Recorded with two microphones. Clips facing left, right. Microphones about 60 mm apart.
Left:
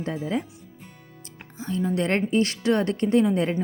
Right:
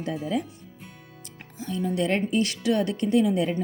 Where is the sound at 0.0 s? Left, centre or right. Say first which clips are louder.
Even; left.